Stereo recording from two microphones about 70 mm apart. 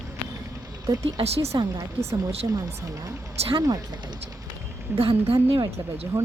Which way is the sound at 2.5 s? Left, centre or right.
Right.